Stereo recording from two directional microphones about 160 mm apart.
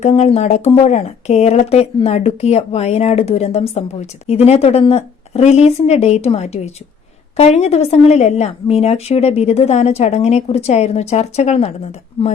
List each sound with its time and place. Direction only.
0.0 s speech: 40° left (ahead or behind)